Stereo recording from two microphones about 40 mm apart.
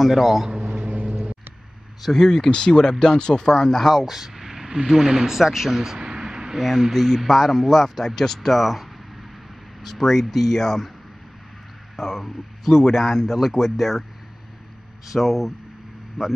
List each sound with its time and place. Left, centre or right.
0.0 s speech: centre
0.5 s vehicle: right
2.0 s speech: centre
4.0 s speech: centre
5.9 s a sound: centre
6.9 s speech: centre
12.0 s speech: centre
15.1 s speech: centre